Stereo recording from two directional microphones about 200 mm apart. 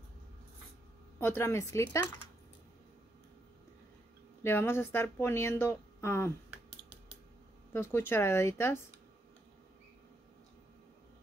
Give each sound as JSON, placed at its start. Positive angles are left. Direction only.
{"t": 1.2, "sound": "speech", "side_deg": 10}
{"t": 4.4, "sound": "speech", "side_deg": 10}
{"t": 7.7, "sound": "speech", "side_deg": 10}